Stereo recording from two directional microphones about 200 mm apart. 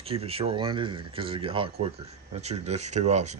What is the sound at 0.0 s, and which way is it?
Speech, 30° right (ahead or behind).